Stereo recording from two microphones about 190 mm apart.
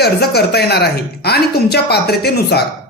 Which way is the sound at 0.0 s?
60° left (ahead or behind).